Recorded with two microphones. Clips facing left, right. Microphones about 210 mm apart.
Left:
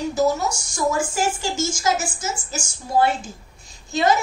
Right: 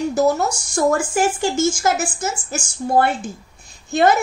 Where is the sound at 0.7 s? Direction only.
60° right (ahead or behind).